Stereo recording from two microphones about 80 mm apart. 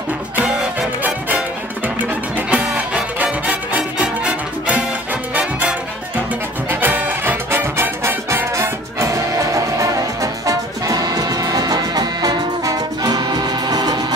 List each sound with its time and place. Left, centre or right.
0.4 s music: right